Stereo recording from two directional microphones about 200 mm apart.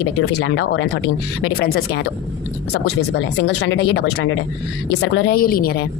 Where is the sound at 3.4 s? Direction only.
60° left (ahead or behind).